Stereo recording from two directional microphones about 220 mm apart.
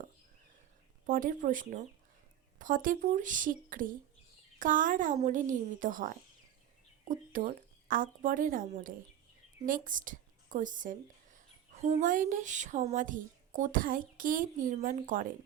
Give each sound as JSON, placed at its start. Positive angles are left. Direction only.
{"t": 1.0, "sound": "speech", "side_deg": -40}